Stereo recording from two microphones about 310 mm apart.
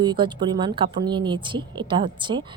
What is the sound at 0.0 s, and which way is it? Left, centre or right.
A woman's voice, centre.